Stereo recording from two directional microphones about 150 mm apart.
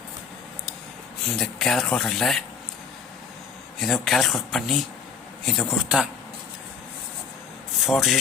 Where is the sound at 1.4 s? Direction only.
Centre (ahead or behind).